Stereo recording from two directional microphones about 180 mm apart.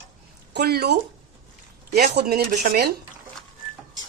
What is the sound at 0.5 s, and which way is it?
A woman's voice, 65° right (ahead or behind).